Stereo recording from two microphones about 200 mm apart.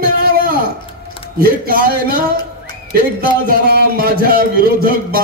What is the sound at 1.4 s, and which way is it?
Speech, 50° right (ahead or behind).